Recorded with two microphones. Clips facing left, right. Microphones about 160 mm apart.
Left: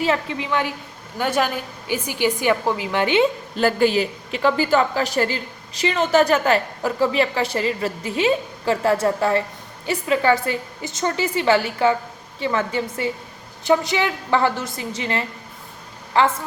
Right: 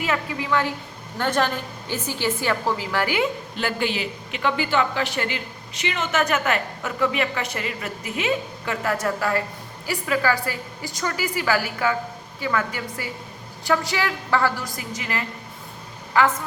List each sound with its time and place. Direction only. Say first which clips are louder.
0.0 s a woman's voice: left 4 dB; 25° left (ahead or behind)
3.6 s a woman's voice: left 8 dB; 40° left (ahead or behind)